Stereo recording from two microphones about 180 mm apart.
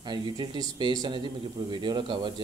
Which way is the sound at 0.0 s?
25° right (ahead or behind).